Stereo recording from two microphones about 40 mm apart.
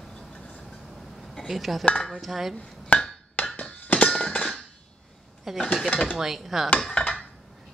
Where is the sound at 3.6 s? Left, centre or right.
Left.